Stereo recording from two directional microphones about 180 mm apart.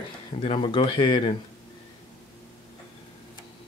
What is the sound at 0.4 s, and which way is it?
Speech, 30° left (ahead or behind).